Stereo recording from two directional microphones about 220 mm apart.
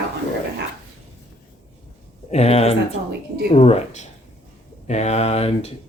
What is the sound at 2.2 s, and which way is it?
Speech, 30° left (ahead or behind).